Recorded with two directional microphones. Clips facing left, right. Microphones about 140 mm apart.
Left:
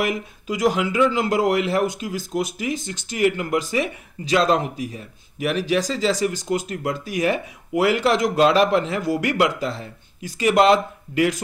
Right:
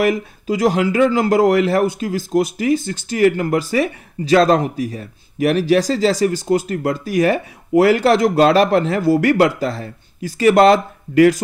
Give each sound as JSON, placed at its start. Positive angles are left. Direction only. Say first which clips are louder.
{"t": 0.0, "sound": "speech", "louder": "right 7 dB", "side_deg": -35}